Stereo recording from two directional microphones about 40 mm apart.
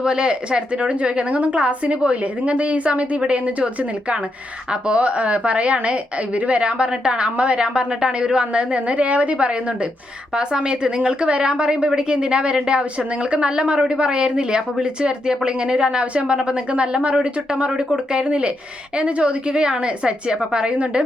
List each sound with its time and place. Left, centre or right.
0.0 s a woman's voice: right